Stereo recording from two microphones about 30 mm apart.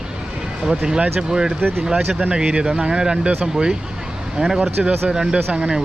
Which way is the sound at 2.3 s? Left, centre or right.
Right.